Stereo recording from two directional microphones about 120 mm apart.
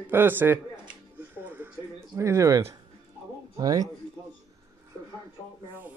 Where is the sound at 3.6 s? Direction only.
30° right (ahead or behind).